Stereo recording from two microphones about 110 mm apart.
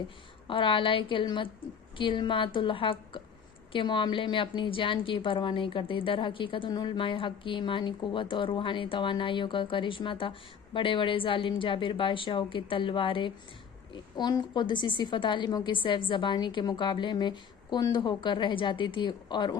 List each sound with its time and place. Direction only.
0.4 s a woman's voice: 50° left (ahead or behind)
13.9 s a woman's voice: 40° left (ahead or behind)